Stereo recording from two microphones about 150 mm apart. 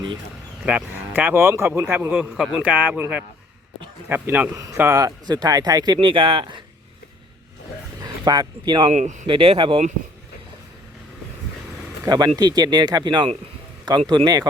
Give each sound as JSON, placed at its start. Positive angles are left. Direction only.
{"t": 0.6, "sound": "speech", "side_deg": -5}
{"t": 2.3, "sound": "speech", "side_deg": 0}
{"t": 8.0, "sound": "speech", "side_deg": -25}
{"t": 8.9, "sound": "speech", "side_deg": -55}
{"t": 9.2, "sound": "speech", "side_deg": -35}
{"t": 12.0, "sound": "speech", "side_deg": -25}